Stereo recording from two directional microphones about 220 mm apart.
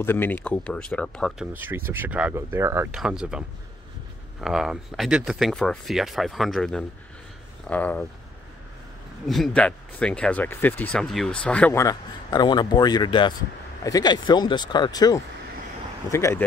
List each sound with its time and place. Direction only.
0.0 s speech: 10° left (ahead or behind)
1.5 s speech: 10° right (ahead or behind); by 8.1 s 5° left (ahead or behind)
9.3 s speech: 5° left (ahead or behind)